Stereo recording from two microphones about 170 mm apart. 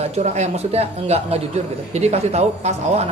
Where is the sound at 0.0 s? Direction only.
40° right (ahead or behind).